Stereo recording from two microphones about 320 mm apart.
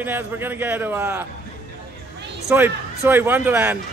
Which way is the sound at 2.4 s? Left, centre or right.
Centre.